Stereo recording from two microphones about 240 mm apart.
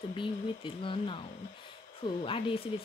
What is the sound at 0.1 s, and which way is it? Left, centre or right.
Speech, left.